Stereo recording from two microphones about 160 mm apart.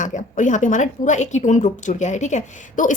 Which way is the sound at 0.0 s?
50° left (ahead or behind).